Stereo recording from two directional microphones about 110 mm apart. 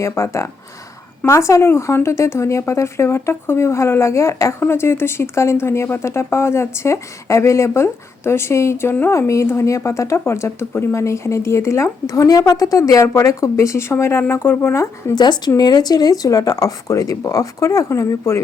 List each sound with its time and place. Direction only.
0.0 s speech: 25° left (ahead or behind)
15.1 s speech: 40° left (ahead or behind)